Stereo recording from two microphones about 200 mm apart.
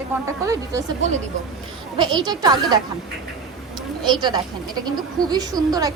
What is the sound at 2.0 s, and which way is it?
Speech, 20° right (ahead or behind).